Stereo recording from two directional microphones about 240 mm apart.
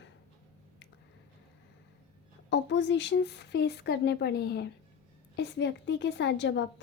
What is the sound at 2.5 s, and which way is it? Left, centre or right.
Speech, left.